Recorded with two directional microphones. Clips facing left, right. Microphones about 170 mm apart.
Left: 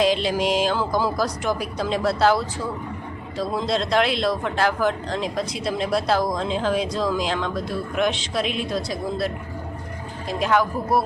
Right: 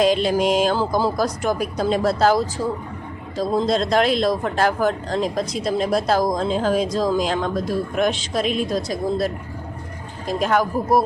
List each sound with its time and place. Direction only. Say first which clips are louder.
0.0 s a man's voice: right 3 dB; 45° right (ahead or behind)
1.1 s a man's voice: right 2 dB; 50° right (ahead or behind)